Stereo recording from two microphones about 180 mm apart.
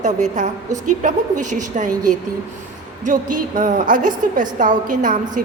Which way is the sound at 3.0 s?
45° right (ahead or behind).